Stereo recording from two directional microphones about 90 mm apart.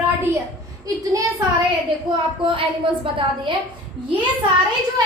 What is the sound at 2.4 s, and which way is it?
A woman's voice, 75° right (ahead or behind).